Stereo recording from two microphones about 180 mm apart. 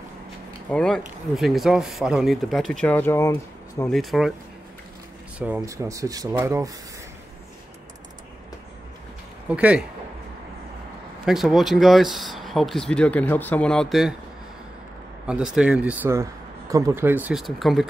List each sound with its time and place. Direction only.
0.7 s speech: 5° left (ahead or behind)
3.9 s speech: centre (ahead or behind)
5.4 s speech: 15° right (ahead or behind)
9.5 s speech: 5° right (ahead or behind)
11.2 s speech: centre (ahead or behind)
15.2 s speech: 5° right (ahead or behind)